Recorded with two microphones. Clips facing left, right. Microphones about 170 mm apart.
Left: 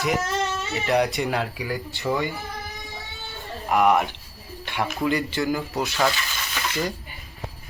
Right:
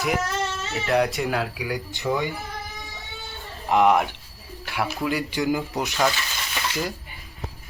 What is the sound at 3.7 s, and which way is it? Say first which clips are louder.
Speech: right 1 dB; 20° right (ahead or behind).